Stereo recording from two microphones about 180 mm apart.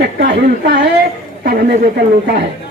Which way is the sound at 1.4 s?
55° right (ahead or behind).